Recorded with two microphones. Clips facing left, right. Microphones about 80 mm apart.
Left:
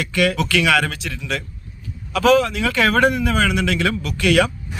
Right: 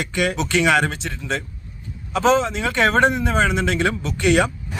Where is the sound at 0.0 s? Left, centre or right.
Right.